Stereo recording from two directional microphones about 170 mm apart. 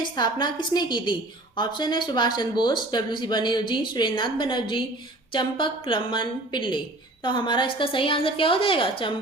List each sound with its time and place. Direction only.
0.0 s a woman's voice: 25° left (ahead or behind)